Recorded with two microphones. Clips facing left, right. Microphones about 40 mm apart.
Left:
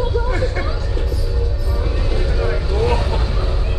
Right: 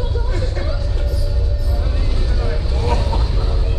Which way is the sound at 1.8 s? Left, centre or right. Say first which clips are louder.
Left 4 dB; left.